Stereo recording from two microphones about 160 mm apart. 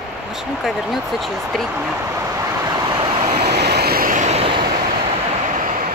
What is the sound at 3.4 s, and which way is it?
Vehicle, 90° right.